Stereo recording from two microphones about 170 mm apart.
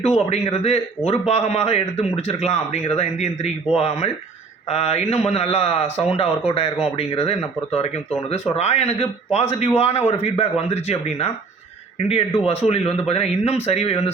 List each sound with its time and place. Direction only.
0.0 s speech: 40° left (ahead or behind)